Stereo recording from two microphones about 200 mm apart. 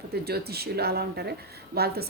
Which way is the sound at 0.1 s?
50° right (ahead or behind).